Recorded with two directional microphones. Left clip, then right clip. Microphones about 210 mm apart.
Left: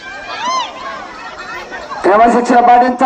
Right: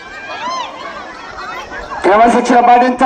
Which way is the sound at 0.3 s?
30° left (ahead or behind).